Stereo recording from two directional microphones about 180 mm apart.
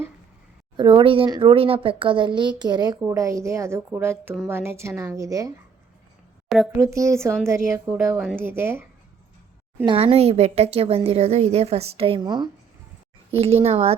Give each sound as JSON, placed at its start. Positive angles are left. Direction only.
{"t": 0.8, "sound": "speech", "side_deg": -30}
{"t": 6.7, "sound": "speech", "side_deg": -15}
{"t": 9.8, "sound": "speech", "side_deg": -30}
{"t": 13.3, "sound": "speech", "side_deg": -35}